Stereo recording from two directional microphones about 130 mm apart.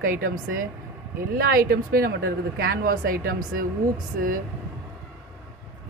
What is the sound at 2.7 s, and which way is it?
Speech, 90° right.